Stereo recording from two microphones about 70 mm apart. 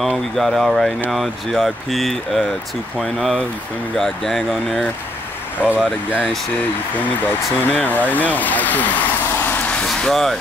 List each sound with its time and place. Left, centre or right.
0.4 s speech: centre
5.6 s speech: centre
7.0 s speech: left
9.9 s speech: centre